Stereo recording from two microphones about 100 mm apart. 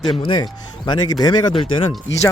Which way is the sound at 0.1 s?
55° left (ahead or behind).